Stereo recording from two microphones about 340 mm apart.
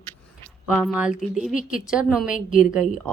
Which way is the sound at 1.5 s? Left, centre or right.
Left.